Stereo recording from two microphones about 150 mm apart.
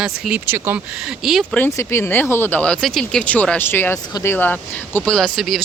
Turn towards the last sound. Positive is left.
turn(degrees=0)  # may be behind; listen again after turning